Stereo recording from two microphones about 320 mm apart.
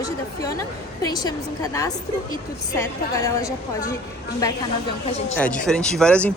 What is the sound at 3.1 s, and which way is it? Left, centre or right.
A woman's voice, centre.